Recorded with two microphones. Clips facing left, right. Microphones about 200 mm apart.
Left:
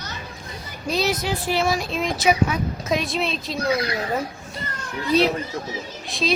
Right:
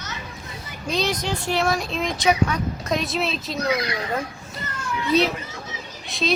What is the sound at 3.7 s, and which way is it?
Speech, 30° left (ahead or behind).